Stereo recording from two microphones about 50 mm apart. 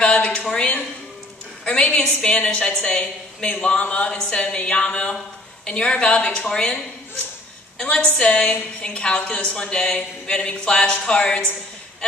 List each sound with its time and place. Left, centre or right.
0.0 s a sound: left
0.5 s a woman's voice: left
7.8 s a woman's voice: centre